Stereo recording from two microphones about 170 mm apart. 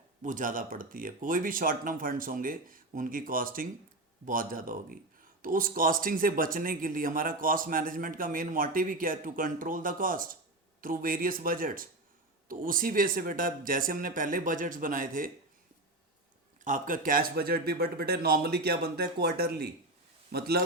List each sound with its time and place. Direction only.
0.2 s speech: 50° right (ahead or behind)
16.6 s speech: 50° right (ahead or behind); by 20.7 s 65° right (ahead or behind)